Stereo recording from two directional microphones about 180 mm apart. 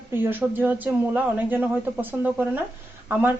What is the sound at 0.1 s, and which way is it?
A woman's voice, 10° right (ahead or behind).